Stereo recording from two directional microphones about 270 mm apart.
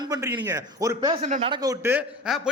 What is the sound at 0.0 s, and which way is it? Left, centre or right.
A man's voice, centre.